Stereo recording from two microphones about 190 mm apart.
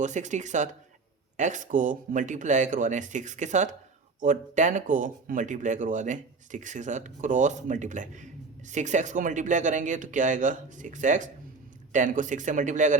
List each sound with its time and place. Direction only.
0.0 s speech: 40° right (ahead or behind)